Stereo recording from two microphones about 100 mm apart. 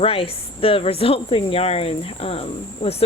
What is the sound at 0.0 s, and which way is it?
Speech, 70° left (ahead or behind).